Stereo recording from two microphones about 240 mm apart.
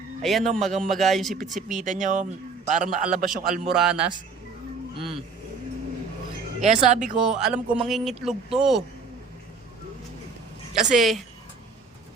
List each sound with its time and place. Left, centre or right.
0.2 s speech: centre
1.5 s a man's voice: right
3.7 s speech: centre
4.9 s speech: right
6.7 s a man's voice: right
7.3 s speech: centre
10.9 s speech: centre